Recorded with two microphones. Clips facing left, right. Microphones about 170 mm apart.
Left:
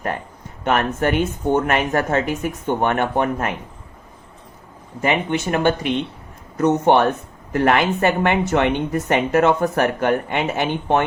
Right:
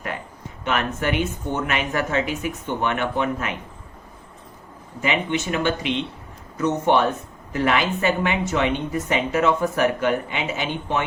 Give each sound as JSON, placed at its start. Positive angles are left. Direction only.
{"t": 0.6, "sound": "speech", "side_deg": 50}
{"t": 5.0, "sound": "speech", "side_deg": 50}